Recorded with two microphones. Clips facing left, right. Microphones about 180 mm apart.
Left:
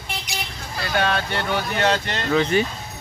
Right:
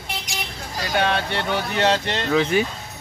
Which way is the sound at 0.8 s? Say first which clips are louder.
Right 1 dB; 20° right (ahead or behind).